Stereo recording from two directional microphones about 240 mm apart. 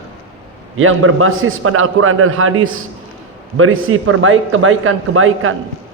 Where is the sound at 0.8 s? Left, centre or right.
Right.